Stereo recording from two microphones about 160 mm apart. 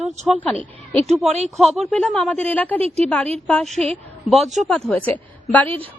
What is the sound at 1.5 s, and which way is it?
A woman's voice, centre (ahead or behind).